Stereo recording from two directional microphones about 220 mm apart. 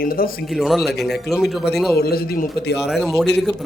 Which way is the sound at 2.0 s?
45° left (ahead or behind).